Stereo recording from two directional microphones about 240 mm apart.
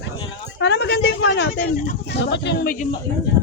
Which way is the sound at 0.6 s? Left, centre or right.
Left.